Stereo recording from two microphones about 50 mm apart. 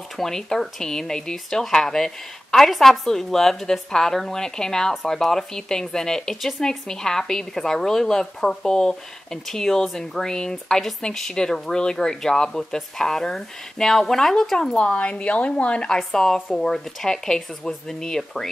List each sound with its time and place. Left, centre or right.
0.2 s speech: centre
14.8 s a woman's voice: left
16.0 s speech: centre